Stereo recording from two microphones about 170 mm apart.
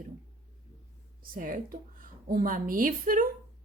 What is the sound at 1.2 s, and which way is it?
A woman's voice, 55° right (ahead or behind).